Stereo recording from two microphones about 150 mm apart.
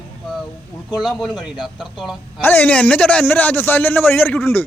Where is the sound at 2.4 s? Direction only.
15° left (ahead or behind).